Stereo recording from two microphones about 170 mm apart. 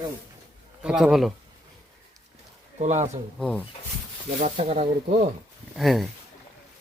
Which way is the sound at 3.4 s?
5° left (ahead or behind).